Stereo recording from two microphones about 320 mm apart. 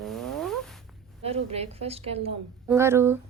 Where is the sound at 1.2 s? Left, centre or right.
Centre.